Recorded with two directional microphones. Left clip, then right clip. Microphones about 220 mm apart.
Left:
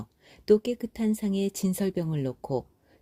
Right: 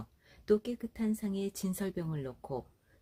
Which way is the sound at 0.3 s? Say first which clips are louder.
Left 8 dB; 40° left (ahead or behind).